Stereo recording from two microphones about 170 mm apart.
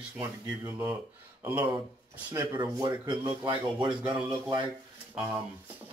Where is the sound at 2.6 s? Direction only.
25° right (ahead or behind).